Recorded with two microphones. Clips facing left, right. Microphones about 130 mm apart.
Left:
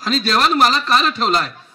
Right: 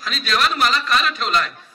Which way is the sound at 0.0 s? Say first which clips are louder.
Left 4 dB; 35° left (ahead or behind).